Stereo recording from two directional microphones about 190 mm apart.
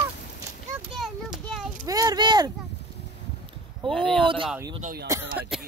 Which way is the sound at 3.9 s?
Centre (ahead or behind).